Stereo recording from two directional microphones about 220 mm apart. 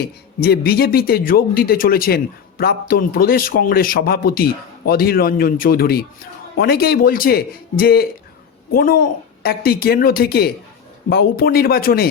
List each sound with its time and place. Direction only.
0.3 s speech: 45° left (ahead or behind)